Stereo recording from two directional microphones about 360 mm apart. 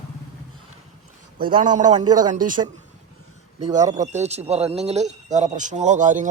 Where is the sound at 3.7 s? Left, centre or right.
Centre.